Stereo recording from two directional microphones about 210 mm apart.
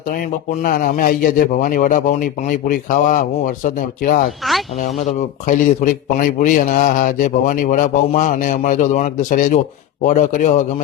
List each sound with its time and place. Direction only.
0.6 s a man's voice: 40° left (ahead or behind)